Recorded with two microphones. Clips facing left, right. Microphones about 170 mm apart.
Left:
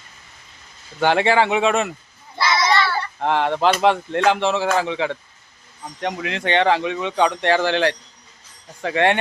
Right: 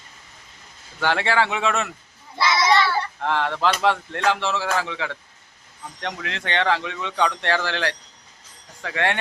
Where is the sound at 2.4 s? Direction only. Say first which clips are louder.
Even; 15° right (ahead or behind).